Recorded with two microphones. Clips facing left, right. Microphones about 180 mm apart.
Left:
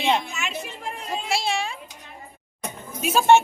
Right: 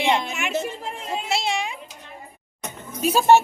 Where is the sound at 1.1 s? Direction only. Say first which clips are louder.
Right 1 dB; 20° right (ahead or behind).